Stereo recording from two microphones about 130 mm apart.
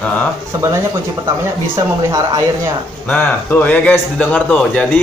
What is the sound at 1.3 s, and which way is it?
Speech, 25° right (ahead or behind).